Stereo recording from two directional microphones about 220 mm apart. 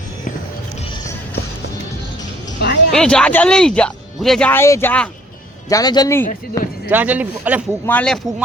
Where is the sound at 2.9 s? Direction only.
5° left (ahead or behind).